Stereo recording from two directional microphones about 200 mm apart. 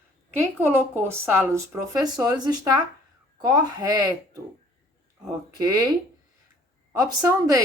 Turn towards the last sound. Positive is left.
turn(degrees=-15)  # may be behind; listen again after turning